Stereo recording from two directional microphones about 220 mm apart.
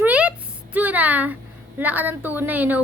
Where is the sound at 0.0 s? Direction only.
5° right (ahead or behind).